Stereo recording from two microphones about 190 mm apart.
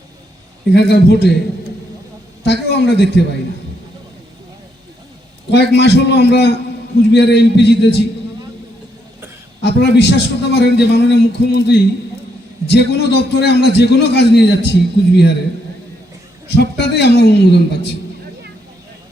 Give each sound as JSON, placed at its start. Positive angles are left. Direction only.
{"t": 0.7, "sound": "a man's voice", "side_deg": 60}
{"t": 2.4, "sound": "a man's voice", "side_deg": 60}
{"t": 5.5, "sound": "a man's voice", "side_deg": 65}
{"t": 9.6, "sound": "a man's voice", "side_deg": 60}
{"t": 16.6, "sound": "a man's voice", "side_deg": 60}